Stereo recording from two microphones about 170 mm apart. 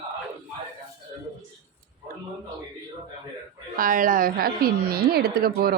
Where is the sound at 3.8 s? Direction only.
55° right (ahead or behind).